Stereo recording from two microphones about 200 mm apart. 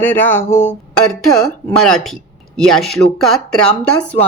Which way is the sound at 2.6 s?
Centre (ahead or behind).